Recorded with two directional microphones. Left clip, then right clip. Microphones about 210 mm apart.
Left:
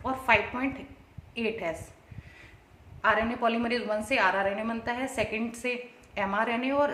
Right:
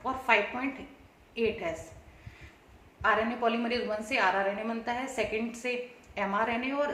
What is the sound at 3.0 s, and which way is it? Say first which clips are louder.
A woman's voice: left 2 dB; 50° left (ahead or behind).